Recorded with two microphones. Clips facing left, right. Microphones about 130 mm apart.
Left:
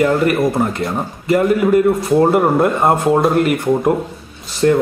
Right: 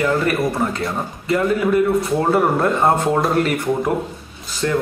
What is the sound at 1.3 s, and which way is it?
Speech, 30° left (ahead or behind).